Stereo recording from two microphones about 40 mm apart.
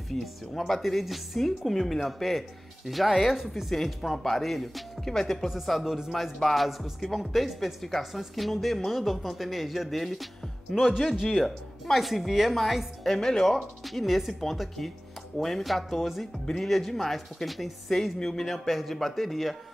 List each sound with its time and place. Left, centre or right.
0.2 s speech: centre